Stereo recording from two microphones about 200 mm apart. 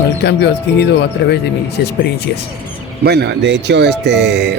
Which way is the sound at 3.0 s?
55° right (ahead or behind).